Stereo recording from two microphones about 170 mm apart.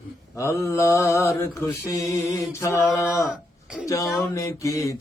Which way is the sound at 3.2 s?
5° right (ahead or behind).